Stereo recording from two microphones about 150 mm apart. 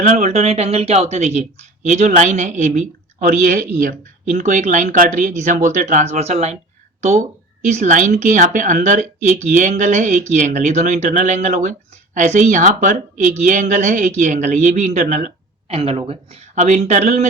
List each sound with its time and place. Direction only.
0.2 s speech: 50° right (ahead or behind)
7.6 s speech: 55° right (ahead or behind)
15.7 s speech: 40° right (ahead or behind)